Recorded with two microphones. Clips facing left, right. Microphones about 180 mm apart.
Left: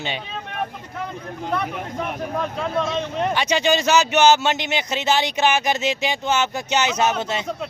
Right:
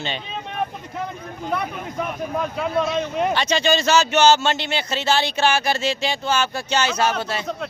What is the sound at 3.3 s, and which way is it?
A man's voice, 15° left (ahead or behind).